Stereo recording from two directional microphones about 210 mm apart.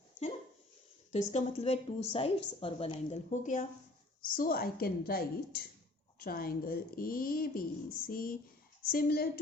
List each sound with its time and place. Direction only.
1.1 s a woman's voice: 30° left (ahead or behind); by 9.4 s 45° left (ahead or behind)